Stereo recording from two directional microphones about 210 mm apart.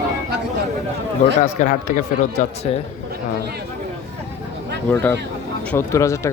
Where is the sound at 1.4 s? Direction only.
35° left (ahead or behind).